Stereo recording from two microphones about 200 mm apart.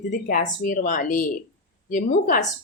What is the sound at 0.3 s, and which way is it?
A woman's voice, 45° left (ahead or behind).